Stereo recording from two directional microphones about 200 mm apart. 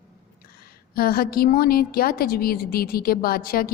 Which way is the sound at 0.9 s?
50° left (ahead or behind).